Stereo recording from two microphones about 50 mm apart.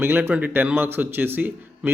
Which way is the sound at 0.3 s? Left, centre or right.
Right.